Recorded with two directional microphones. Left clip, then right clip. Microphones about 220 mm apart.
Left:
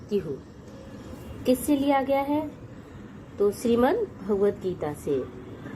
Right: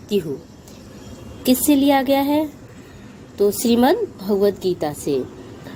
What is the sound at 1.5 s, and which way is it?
Speech, 35° right (ahead or behind).